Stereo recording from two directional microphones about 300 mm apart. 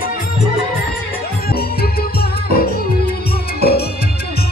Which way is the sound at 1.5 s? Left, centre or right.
Left.